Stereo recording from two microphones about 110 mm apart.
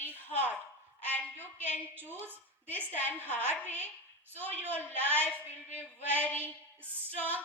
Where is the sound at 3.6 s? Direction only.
15° left (ahead or behind).